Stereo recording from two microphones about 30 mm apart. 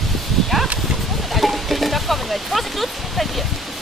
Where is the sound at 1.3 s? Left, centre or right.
Centre.